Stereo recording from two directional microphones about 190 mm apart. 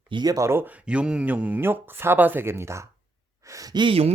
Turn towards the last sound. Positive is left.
turn(degrees=-30)  # may be behind; listen again after turning